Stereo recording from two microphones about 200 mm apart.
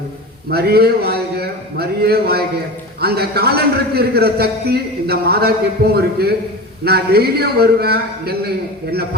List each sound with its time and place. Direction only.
0.5 s a man's voice: 50° right (ahead or behind)